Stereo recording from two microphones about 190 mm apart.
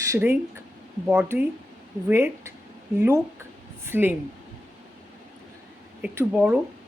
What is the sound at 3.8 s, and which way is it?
Speech, 10° right (ahead or behind).